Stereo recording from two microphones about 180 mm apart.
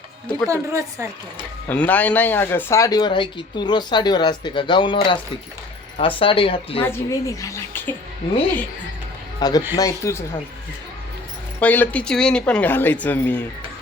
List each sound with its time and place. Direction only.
0.4 s a woman's voice: 15° right (ahead or behind)
1.6 s speech: 10° left (ahead or behind); by 6.8 s 30° left (ahead or behind)
6.8 s speech: 15° left (ahead or behind)
9.4 s speech: 20° left (ahead or behind)
11.6 s speech: 10° left (ahead or behind)